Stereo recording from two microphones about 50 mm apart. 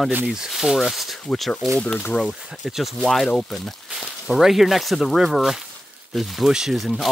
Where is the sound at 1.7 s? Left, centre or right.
Left.